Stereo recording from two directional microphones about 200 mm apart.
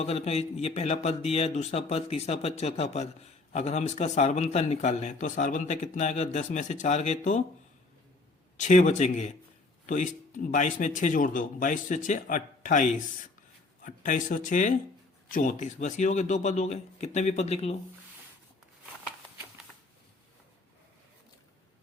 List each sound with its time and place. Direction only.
0.0 s a man's voice: 30° left (ahead or behind)
8.5 s a man's voice: 35° left (ahead or behind)